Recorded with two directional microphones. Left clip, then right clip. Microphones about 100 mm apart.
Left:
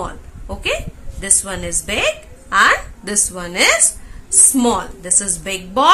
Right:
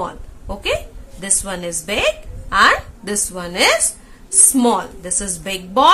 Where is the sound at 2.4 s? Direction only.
30° right (ahead or behind).